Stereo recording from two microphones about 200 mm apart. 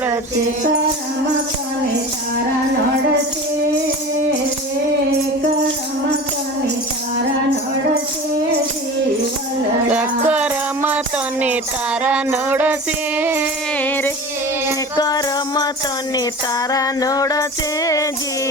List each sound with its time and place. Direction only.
9.9 s music: 5° right (ahead or behind)
13.8 s music: 10° left (ahead or behind)
16.7 s a sound: 20° left (ahead or behind)
17.8 s music: 15° left (ahead or behind)